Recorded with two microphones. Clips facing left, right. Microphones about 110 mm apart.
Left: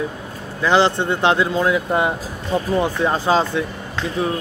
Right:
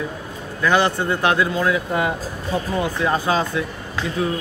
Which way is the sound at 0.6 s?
25° left (ahead or behind).